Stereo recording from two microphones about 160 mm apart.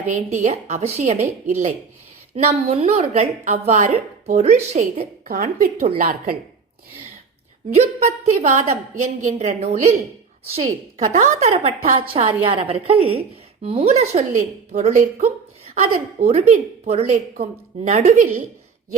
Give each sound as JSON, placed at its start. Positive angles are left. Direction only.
{"t": 0.1, "sound": "a woman's voice", "side_deg": -45}
{"t": 5.3, "sound": "speech", "side_deg": -55}
{"t": 7.8, "sound": "a woman's voice", "side_deg": -45}